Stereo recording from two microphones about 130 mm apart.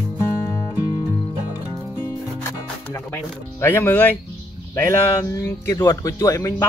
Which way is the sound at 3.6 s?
20° left (ahead or behind).